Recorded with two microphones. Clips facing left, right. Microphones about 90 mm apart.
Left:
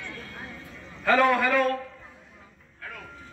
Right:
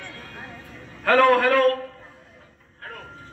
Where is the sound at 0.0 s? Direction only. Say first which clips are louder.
Right 1 dB; 45° right (ahead or behind).